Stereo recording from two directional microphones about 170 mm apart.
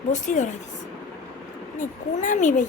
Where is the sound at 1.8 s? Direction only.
50° left (ahead or behind).